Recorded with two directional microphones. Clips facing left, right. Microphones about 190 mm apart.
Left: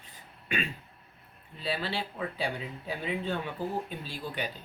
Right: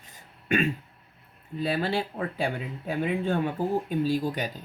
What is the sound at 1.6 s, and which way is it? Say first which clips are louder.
Speech: right 6 dB; 45° right (ahead or behind).